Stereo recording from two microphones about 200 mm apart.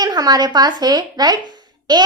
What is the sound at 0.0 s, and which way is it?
A woman's voice, 20° right (ahead or behind).